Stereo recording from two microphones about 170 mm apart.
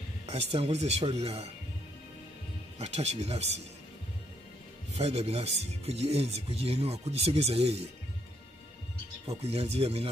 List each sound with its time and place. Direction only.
0.3 s speech: 35° right (ahead or behind)
2.8 s speech: 40° right (ahead or behind)
4.9 s speech: 35° right (ahead or behind)
9.4 s speech: 35° right (ahead or behind)